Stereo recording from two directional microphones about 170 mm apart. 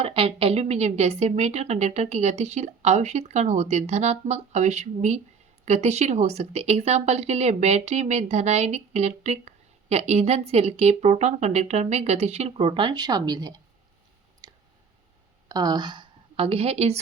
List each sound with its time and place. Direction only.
0.0 s a woman's voice: 35° right (ahead or behind)
14.4 s a sound: 25° right (ahead or behind)
15.4 s a woman's voice: 25° right (ahead or behind)